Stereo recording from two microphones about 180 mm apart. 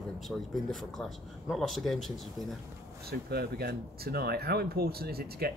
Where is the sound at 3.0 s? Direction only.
60° right (ahead or behind).